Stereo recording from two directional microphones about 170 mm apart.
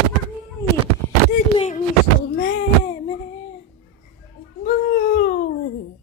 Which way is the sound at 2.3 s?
60° left (ahead or behind).